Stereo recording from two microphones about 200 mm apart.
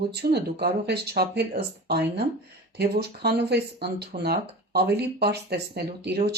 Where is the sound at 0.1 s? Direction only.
55° right (ahead or behind).